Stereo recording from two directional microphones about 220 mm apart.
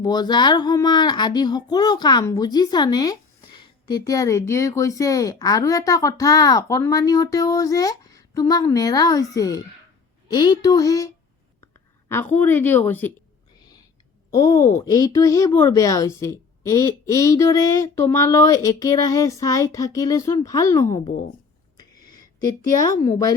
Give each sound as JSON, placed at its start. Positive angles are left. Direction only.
{"t": 0.0, "sound": "speech", "side_deg": 20}
{"t": 14.3, "sound": "speech", "side_deg": 15}
{"t": 21.1, "sound": "speech", "side_deg": 35}
{"t": 21.8, "sound": "a sound", "side_deg": 20}
{"t": 22.8, "sound": "speech", "side_deg": 15}